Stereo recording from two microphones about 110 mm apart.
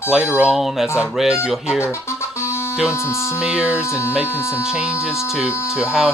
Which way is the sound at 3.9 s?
25° left (ahead or behind).